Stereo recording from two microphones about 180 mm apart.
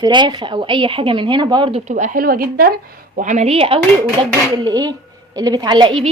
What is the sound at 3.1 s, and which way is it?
A woman's voice, 45° right (ahead or behind).